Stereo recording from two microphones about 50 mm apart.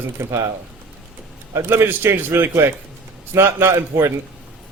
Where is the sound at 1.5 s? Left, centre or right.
Right.